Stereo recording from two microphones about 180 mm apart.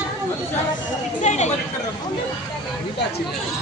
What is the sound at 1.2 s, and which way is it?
Chatter, 40° left (ahead or behind).